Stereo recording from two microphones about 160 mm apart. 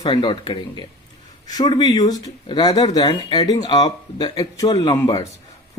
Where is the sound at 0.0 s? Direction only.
30° left (ahead or behind).